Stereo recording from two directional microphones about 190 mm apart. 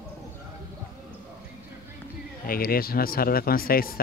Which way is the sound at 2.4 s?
50° left (ahead or behind).